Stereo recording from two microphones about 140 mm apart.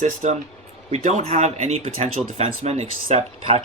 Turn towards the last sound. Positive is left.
turn(degrees=-45)  # may be behind; listen again after turning